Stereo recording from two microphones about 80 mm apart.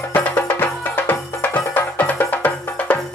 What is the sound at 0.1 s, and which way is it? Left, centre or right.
Music, left.